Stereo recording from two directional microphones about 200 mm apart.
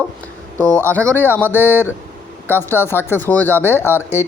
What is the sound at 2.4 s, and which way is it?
Speech, 10° left (ahead or behind).